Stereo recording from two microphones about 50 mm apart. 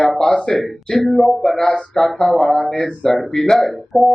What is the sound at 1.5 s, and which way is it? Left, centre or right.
Speech, centre.